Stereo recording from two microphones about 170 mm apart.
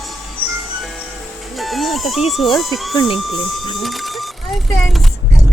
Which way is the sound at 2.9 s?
30° left (ahead or behind).